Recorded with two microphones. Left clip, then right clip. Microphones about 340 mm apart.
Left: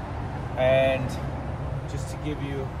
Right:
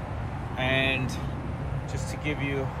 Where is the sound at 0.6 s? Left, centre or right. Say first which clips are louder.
Left 5 dB; centre.